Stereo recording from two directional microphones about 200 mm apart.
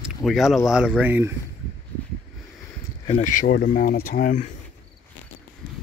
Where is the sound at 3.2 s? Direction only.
40° left (ahead or behind).